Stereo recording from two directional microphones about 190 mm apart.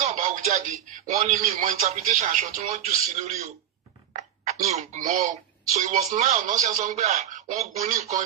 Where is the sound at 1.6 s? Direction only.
35° right (ahead or behind).